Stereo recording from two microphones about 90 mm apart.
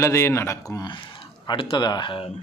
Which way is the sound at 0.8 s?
60° left (ahead or behind).